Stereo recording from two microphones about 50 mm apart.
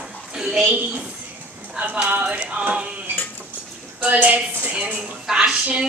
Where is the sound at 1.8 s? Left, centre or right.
Right.